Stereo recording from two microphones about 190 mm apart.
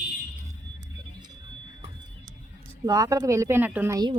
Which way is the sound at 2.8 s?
20° right (ahead or behind).